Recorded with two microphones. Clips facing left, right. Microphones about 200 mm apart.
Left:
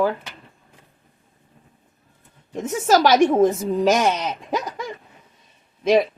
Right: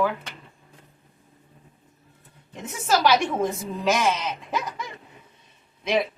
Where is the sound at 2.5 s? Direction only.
45° left (ahead or behind).